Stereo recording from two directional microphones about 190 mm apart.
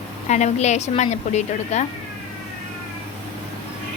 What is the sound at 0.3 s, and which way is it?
A woman's voice, 40° left (ahead or behind).